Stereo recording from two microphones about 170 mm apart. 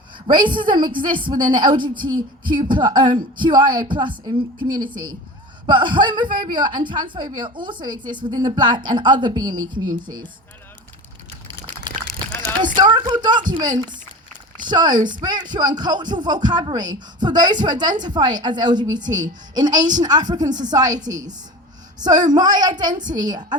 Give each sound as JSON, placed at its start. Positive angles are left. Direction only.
{"t": 0.3, "sound": "a woman's voice", "side_deg": -25}
{"t": 12.7, "sound": "a woman's voice", "side_deg": -25}